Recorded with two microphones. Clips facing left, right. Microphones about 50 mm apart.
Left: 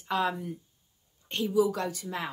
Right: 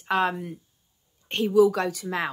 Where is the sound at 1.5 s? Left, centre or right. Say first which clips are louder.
Right 7 dB; right.